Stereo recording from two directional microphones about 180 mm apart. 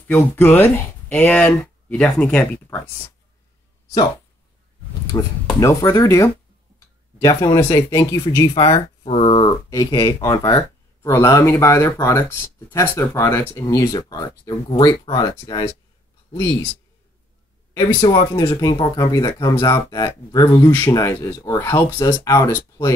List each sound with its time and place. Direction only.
0.1 s speech: 10° left (ahead or behind)
5.1 s speech: 20° left (ahead or behind)
9.0 s speech: 35° left (ahead or behind)
17.7 s speech: 25° left (ahead or behind)